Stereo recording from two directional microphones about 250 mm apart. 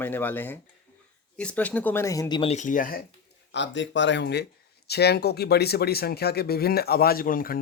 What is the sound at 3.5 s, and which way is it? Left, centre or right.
Speech, left.